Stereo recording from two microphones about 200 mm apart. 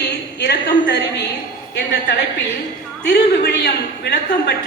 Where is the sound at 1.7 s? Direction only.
60° left (ahead or behind).